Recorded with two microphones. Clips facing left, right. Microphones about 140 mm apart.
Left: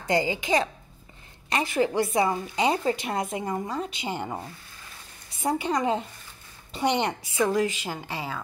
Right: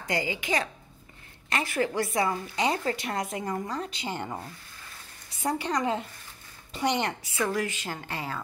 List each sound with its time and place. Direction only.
0.0 s a woman's voice: 25° left (ahead or behind); by 8.4 s 10° left (ahead or behind)